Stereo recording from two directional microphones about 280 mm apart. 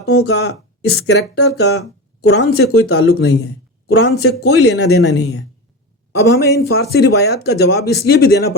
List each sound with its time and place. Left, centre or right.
0.2 s speech: left